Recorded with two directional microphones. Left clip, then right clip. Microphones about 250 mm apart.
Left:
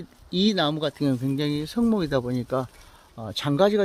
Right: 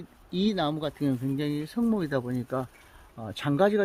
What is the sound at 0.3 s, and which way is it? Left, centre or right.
Speech, left.